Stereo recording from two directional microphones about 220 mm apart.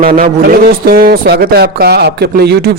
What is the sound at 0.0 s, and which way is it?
Speech, 40° right (ahead or behind).